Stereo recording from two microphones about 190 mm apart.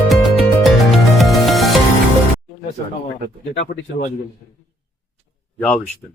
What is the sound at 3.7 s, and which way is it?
Speech, 45° left (ahead or behind).